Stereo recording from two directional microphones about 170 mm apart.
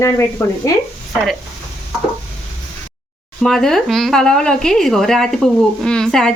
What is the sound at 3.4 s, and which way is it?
Speech, 5° left (ahead or behind).